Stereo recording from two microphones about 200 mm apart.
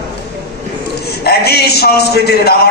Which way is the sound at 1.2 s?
50° left (ahead or behind).